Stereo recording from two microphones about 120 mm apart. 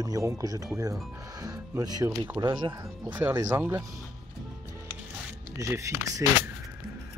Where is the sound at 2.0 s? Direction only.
15° right (ahead or behind).